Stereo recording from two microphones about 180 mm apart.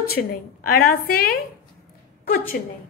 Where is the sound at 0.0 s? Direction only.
60° left (ahead or behind).